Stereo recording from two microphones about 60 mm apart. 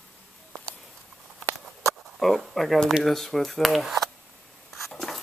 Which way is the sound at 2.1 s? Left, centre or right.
Centre.